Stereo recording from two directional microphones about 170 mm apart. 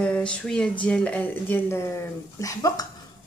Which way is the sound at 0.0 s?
5° left (ahead or behind).